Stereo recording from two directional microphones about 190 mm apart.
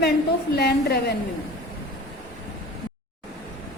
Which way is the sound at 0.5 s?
60° left (ahead or behind).